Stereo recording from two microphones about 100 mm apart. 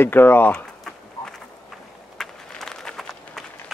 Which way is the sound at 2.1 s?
5° left (ahead or behind).